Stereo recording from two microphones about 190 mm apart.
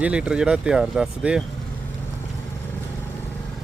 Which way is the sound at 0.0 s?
5° right (ahead or behind).